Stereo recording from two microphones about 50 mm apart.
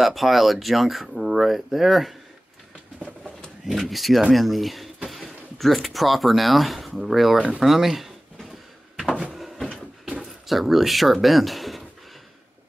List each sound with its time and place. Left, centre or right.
0.0 s speech: centre
3.8 s speech: centre
7.3 s speech: right
7.6 s drawer open or close: centre
9.0 s a sound: centre
9.3 s a sound: centre
10.4 s speech: centre